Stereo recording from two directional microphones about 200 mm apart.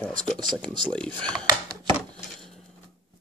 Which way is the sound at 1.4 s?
20° right (ahead or behind).